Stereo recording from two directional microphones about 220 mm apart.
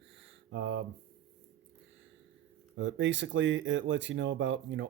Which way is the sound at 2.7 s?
55° right (ahead or behind).